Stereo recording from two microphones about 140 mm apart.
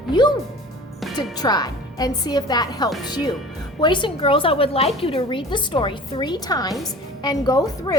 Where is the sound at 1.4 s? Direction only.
30° left (ahead or behind).